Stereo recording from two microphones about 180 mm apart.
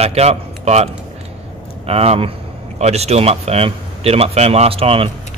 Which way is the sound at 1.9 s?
35° right (ahead or behind).